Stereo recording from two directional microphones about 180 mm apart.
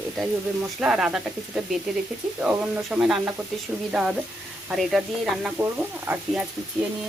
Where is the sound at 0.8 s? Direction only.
5° right (ahead or behind).